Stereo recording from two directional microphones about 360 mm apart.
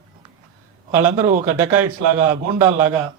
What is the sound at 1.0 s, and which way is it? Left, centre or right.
Speech, centre.